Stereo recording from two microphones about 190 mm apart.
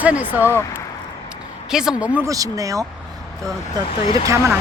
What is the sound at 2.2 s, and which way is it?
Speech, 15° right (ahead or behind).